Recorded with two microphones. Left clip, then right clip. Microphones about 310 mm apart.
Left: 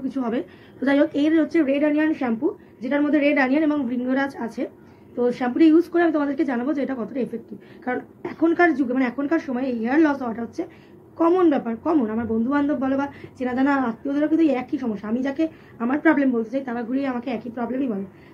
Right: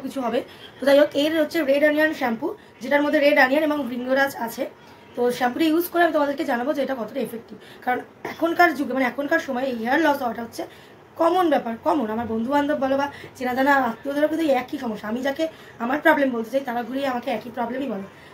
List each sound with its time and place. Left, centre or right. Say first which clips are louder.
0.1 s a woman's voice: right 2 dB; centre